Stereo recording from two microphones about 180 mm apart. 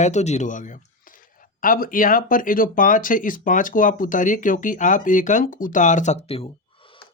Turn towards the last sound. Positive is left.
turn(degrees=30)  # may be behind; listen again after turning